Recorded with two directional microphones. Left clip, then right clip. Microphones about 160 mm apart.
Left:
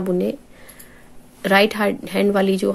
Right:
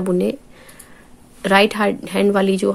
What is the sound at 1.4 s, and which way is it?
Speech, 15° right (ahead or behind).